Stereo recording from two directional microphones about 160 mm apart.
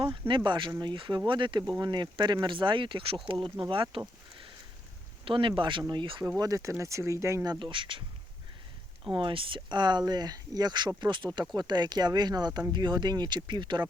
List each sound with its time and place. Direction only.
0.0 s speech: 30° right (ahead or behind)
5.2 s speech: 30° right (ahead or behind)
7.6 s speech: 30° right (ahead or behind)
9.1 s speech: 30° right (ahead or behind)